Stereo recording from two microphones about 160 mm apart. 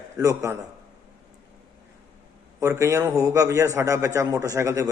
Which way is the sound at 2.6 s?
20° right (ahead or behind).